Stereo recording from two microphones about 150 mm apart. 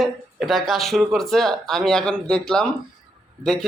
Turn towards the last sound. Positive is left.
turn(degrees=5)  # may be behind; listen again after turning